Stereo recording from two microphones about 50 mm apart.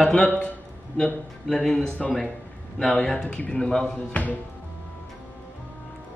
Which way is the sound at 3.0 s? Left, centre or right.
Centre.